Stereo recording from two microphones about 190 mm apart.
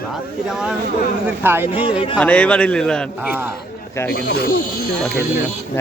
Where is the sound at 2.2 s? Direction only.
5° left (ahead or behind).